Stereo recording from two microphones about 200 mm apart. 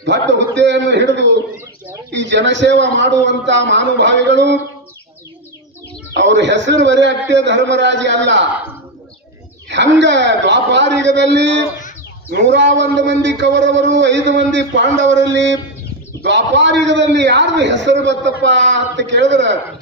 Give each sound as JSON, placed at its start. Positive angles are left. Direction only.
{"t": 0.0, "sound": "a man's voice", "side_deg": -60}
{"t": 6.1, "sound": "a man's voice", "side_deg": -65}
{"t": 9.7, "sound": "a man's voice", "side_deg": -65}